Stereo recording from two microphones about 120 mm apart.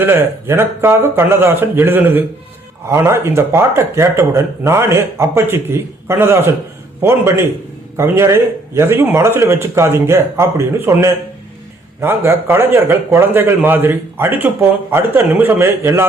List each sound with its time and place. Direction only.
0.0 s a man's voice: 20° right (ahead or behind)